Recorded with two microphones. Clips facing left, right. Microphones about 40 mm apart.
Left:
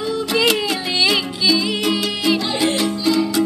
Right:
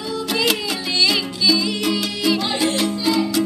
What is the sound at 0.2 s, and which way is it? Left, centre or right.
Music, centre.